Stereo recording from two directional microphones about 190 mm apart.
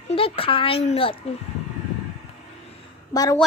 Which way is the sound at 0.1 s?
30° left (ahead or behind).